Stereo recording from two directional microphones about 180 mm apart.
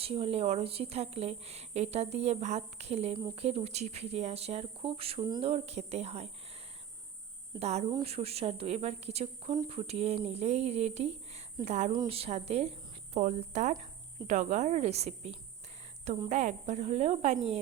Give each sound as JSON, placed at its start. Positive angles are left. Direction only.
{"t": 0.0, "sound": "a woman's voice", "side_deg": -30}
{"t": 7.6, "sound": "a woman's voice", "side_deg": -40}